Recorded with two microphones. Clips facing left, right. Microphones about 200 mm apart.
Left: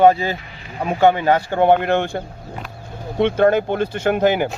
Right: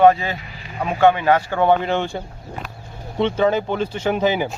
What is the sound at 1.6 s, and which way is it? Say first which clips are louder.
Speech: left 2 dB; 55° left (ahead or behind).